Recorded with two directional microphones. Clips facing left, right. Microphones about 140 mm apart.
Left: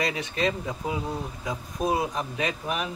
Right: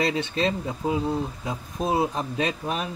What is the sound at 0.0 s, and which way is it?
Speech, 30° right (ahead or behind).